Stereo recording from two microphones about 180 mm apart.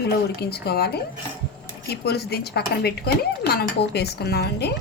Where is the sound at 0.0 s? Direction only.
65° left (ahead or behind).